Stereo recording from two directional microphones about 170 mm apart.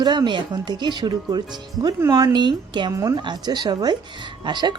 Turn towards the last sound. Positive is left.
turn(degrees=-25)  # may be behind; listen again after turning